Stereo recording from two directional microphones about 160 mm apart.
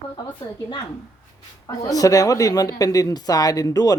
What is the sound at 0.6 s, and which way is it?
Speech, 25° left (ahead or behind).